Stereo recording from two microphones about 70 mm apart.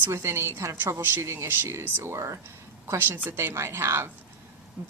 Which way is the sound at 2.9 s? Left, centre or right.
Right.